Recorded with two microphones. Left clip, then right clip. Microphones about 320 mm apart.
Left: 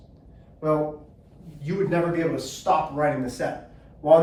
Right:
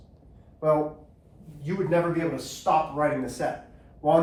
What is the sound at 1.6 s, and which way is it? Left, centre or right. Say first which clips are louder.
Speech: left 1 dB; centre.